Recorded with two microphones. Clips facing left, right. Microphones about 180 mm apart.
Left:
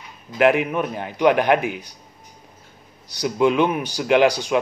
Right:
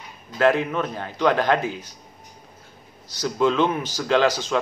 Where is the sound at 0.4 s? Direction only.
15° left (ahead or behind).